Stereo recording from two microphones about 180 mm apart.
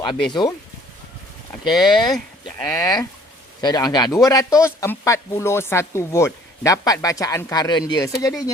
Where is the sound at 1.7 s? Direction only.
Centre (ahead or behind).